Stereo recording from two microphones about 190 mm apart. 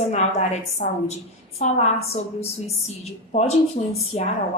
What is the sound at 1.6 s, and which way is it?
A woman's voice, 35° left (ahead or behind).